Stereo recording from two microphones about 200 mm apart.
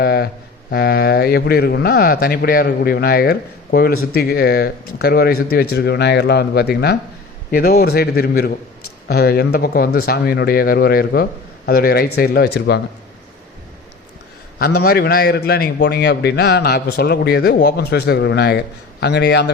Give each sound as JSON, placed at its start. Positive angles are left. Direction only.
{"t": 0.0, "sound": "a sound", "side_deg": 50}
{"t": 0.7, "sound": "speech", "side_deg": 50}
{"t": 14.6, "sound": "a man's voice", "side_deg": 50}